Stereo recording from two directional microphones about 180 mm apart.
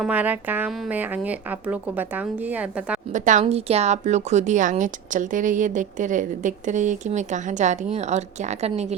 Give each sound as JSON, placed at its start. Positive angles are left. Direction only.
{"t": 0.0, "sound": "a woman's voice", "side_deg": -10}
{"t": 3.1, "sound": "a woman's voice", "side_deg": -45}